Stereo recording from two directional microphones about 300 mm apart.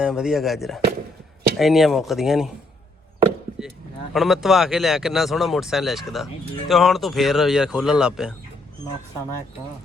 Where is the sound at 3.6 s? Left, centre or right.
Centre.